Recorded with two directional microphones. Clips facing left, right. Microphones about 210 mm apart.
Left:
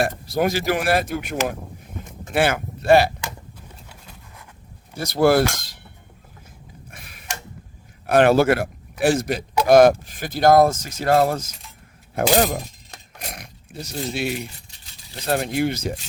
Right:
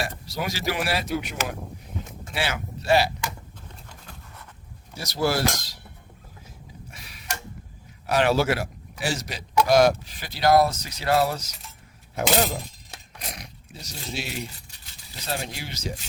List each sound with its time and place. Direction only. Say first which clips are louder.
0.0 s speech: left 9 dB; 50° left (ahead or behind)
4.9 s speech: left 8 dB; 55° left (ahead or behind)
6.9 s a sound: left 2 dB; 50° left (ahead or behind)
8.0 s a man's voice: left 6 dB; 55° left (ahead or behind)
13.1 s a sound: left 2 dB; 55° left (ahead or behind)
15.3 s speech: left 11 dB; 55° left (ahead or behind)